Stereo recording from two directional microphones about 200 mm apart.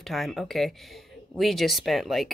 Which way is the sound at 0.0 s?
Centre (ahead or behind).